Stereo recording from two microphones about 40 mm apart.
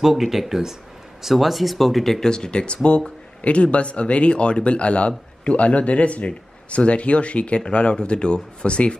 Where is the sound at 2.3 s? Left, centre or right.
Left.